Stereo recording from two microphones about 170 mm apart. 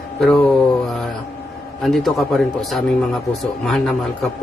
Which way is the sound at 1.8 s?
Centre (ahead or behind).